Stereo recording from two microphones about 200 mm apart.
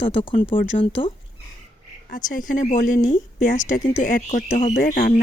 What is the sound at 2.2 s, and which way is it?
Speech, 40° left (ahead or behind).